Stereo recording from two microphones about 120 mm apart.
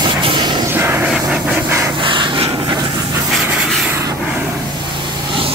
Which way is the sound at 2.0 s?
45° right (ahead or behind).